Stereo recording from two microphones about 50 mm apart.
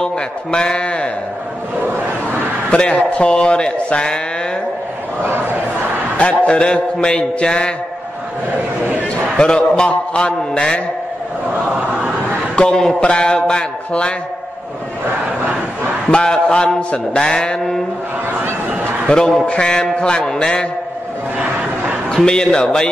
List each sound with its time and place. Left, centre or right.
0.0 s music: centre
2.7 s music: centre
6.1 s music: left
9.8 s music: centre
12.5 s a man's voice: centre
13.0 s music: centre
16.1 s mantra: centre
19.0 s mantra: centre
22.1 s mantra: centre